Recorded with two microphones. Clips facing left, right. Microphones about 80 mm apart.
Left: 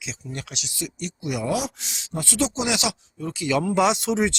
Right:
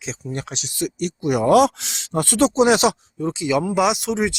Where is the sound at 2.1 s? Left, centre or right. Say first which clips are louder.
Right 7 dB; right.